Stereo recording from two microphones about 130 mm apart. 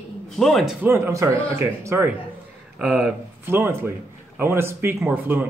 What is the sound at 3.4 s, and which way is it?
A man's voice, 20° right (ahead or behind).